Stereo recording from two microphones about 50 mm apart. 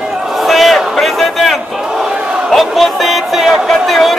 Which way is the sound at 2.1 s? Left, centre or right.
Centre.